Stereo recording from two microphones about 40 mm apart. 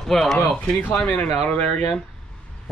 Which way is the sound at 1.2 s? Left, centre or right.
Left.